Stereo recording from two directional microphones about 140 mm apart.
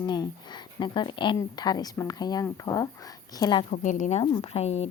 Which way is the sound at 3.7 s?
65° left (ahead or behind).